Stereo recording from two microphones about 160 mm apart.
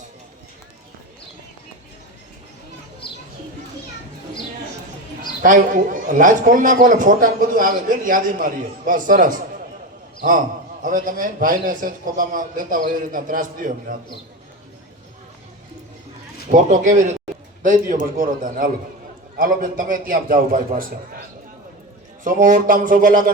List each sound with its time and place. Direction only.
3.0 s bird: 30° left (ahead or behind)
5.4 s a man's voice: 55° right (ahead or behind)
16.5 s a man's voice: 55° right (ahead or behind)
22.2 s a man's voice: 55° right (ahead or behind)